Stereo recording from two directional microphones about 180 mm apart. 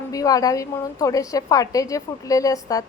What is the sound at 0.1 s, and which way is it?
A woman's voice, 20° left (ahead or behind).